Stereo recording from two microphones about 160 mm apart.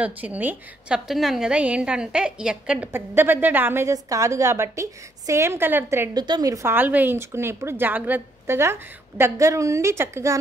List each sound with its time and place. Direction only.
0.0 s a woman's voice: 10° right (ahead or behind)